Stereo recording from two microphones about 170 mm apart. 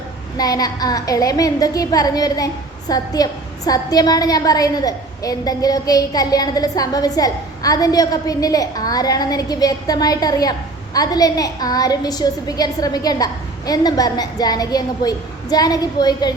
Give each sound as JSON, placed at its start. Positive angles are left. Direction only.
{"t": 0.3, "sound": "a woman's voice", "side_deg": 20}